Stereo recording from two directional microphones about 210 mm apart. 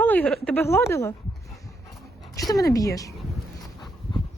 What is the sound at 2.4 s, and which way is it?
Speech, 15° left (ahead or behind).